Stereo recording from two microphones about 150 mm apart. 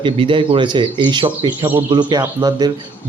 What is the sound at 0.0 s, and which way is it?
Speech, 35° right (ahead or behind).